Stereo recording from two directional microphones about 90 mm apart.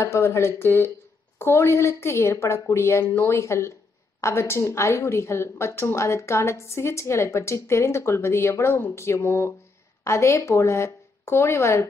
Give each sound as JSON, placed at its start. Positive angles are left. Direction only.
{"t": 0.0, "sound": "a woman's voice", "side_deg": 30}